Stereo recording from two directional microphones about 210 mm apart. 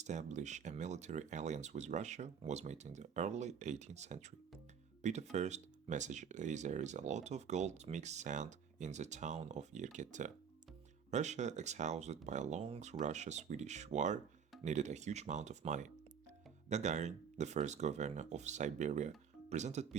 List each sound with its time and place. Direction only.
0.0 s speech: 35° right (ahead or behind)